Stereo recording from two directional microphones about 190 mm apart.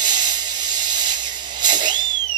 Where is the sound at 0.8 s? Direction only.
20° right (ahead or behind).